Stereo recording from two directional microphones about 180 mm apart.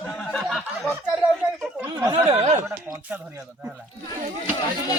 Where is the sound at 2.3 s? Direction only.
35° right (ahead or behind).